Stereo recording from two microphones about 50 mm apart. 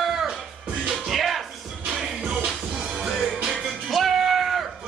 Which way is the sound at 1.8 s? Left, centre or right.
Centre.